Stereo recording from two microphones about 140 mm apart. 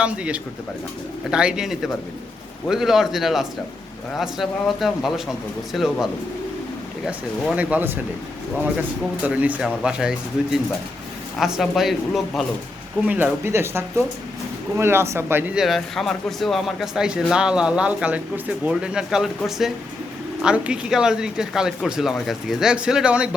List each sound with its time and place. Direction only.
0.0 s speech: 10° right (ahead or behind)
7.5 s speech: 10° right (ahead or behind)
9.2 s speech: 10° right (ahead or behind)
13.1 s speech: 10° right (ahead or behind)
15.6 s speech: centre (ahead or behind)